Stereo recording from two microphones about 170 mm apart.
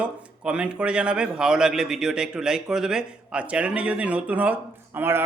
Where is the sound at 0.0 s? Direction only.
5° right (ahead or behind).